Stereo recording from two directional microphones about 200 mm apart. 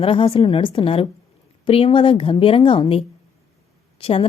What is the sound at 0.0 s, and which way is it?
A woman's voice, 25° left (ahead or behind).